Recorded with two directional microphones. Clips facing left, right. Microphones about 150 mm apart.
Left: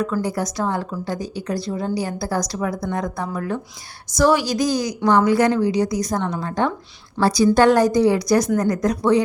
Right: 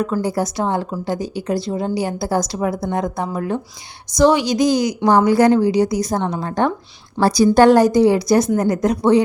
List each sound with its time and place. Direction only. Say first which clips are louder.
0.0 s a woman's voice: right 3 dB; 25° right (ahead or behind)